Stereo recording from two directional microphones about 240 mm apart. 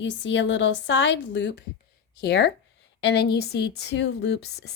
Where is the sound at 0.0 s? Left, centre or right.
Left.